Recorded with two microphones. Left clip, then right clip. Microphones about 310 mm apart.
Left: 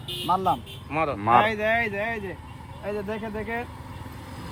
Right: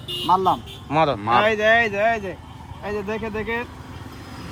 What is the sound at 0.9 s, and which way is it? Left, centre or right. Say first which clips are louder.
Speech: right 7 dB; right.